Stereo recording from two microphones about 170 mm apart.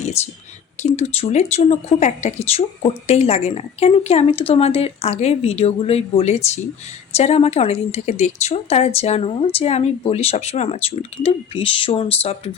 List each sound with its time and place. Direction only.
0.8 s speech: 40° left (ahead or behind)